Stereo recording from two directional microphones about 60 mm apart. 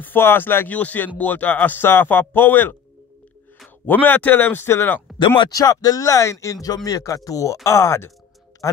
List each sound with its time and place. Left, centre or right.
0.0 s speech: left
0.7 s speech: left
3.8 s speech: left
5.5 s speech: left
6.4 s speech: left
7.6 s speech: left